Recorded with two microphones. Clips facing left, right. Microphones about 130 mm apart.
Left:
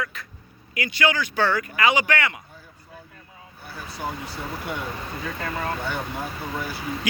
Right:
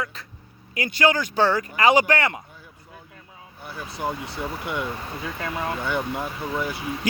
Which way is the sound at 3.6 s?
20° right (ahead or behind).